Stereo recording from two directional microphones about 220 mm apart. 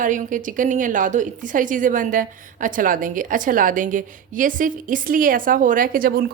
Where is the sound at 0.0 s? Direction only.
35° right (ahead or behind).